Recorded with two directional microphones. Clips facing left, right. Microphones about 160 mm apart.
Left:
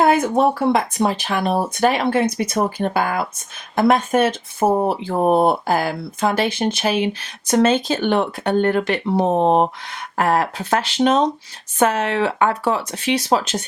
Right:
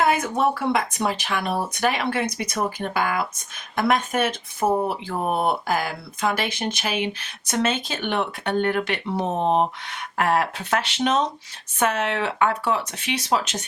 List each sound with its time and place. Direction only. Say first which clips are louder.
0.0 s speech: left 5 dB; 35° left (ahead or behind)